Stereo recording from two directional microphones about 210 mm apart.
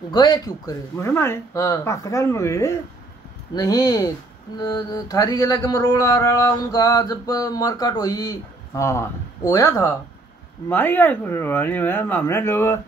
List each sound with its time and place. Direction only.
0.1 s speech: 20° left (ahead or behind)